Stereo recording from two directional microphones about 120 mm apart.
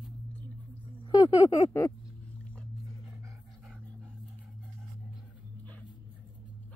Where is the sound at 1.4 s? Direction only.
65° left (ahead or behind).